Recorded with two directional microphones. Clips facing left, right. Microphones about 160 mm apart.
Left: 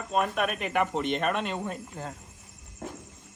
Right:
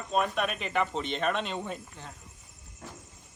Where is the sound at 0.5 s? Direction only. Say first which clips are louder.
Left 2 dB; 55° left (ahead or behind).